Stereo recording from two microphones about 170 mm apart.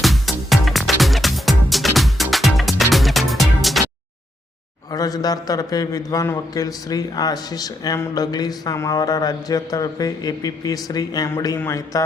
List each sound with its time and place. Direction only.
0.0 s music: centre (ahead or behind)
4.9 s a man's voice: 20° left (ahead or behind)